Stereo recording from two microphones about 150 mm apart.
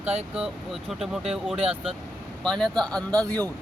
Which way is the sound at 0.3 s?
5° right (ahead or behind).